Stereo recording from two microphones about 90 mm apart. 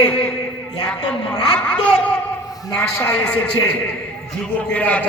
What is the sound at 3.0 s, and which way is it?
A man's voice, 25° left (ahead or behind).